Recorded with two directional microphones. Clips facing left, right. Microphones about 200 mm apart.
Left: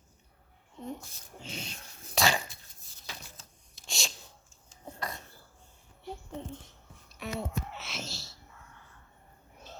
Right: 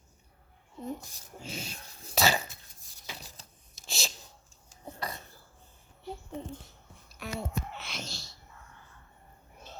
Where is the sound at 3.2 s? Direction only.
35° right (ahead or behind).